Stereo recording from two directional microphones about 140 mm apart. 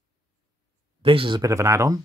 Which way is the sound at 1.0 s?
40° right (ahead or behind).